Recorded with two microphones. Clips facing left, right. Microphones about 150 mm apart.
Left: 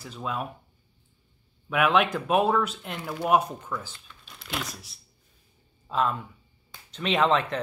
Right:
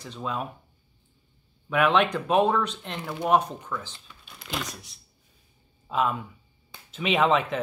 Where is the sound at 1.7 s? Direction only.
5° left (ahead or behind).